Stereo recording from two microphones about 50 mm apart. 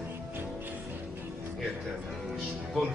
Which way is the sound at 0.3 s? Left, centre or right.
Right.